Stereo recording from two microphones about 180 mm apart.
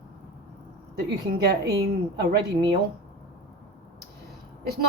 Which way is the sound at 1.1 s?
65° right (ahead or behind).